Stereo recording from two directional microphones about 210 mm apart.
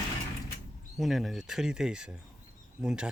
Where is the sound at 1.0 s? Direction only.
Centre (ahead or behind).